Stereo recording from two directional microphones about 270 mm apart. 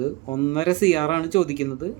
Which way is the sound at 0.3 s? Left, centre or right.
Centre.